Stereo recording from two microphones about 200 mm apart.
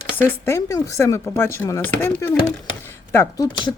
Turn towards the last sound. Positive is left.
turn(degrees=20)  # may be behind; listen again after turning